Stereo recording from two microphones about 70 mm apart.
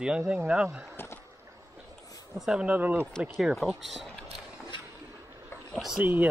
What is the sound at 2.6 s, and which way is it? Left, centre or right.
Speech, right.